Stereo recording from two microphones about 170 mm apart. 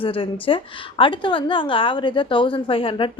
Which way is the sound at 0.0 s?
30° left (ahead or behind).